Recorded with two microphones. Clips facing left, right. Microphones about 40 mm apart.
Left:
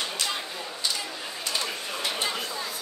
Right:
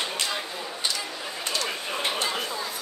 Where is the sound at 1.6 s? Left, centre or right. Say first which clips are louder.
Right 2 dB; right.